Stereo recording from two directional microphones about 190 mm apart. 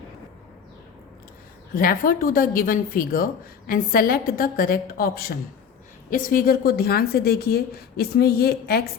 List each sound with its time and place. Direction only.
1.7 s a woman's voice: 50° left (ahead or behind)